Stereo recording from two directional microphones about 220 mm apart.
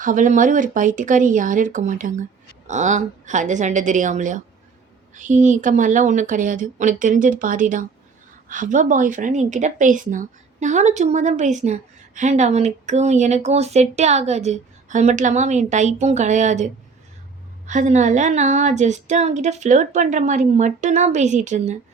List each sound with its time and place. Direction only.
0.0 s a woman's voice: 35° right (ahead or behind)